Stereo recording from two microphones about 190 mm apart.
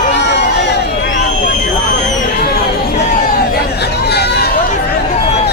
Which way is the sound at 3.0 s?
40° left (ahead or behind).